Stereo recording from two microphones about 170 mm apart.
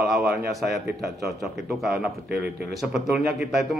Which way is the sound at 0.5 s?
Centre (ahead or behind).